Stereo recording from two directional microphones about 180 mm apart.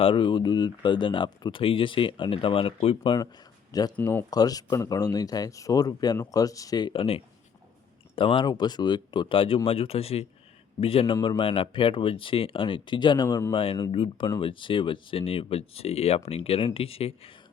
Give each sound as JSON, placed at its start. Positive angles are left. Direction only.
{"t": 0.0, "sound": "speech", "side_deg": 25}
{"t": 4.0, "sound": "speech", "side_deg": 10}
{"t": 4.3, "sound": "speech", "side_deg": 20}